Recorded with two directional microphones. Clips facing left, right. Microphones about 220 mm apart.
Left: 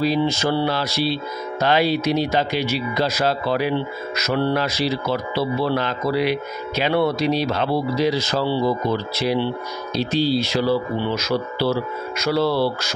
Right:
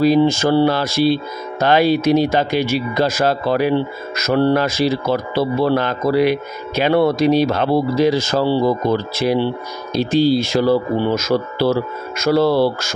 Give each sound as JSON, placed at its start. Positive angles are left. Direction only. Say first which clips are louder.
{"t": 0.0, "sound": "speech", "louder": "right 6 dB", "side_deg": -50}